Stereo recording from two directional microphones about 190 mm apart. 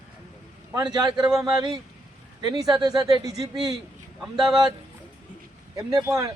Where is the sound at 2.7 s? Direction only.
20° right (ahead or behind).